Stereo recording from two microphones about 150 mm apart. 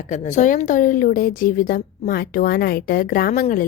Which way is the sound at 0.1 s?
55° left (ahead or behind).